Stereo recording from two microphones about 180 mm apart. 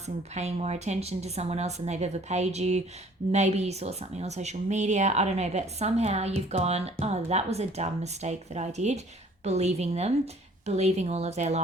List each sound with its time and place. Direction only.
0.3 s speech: 35° right (ahead or behind)